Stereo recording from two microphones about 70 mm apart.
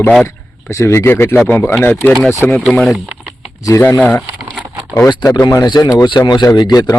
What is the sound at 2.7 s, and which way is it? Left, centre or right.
Speech, centre.